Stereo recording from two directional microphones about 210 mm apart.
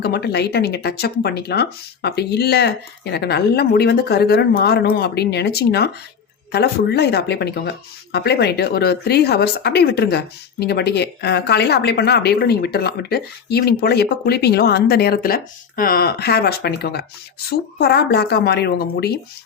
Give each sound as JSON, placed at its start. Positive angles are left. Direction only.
{"t": 0.0, "sound": "speech", "side_deg": 50}